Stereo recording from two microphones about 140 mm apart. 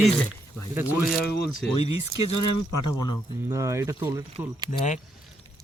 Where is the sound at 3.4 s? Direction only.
20° right (ahead or behind).